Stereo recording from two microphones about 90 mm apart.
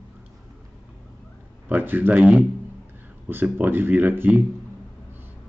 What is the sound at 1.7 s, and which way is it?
Speech, 20° right (ahead or behind).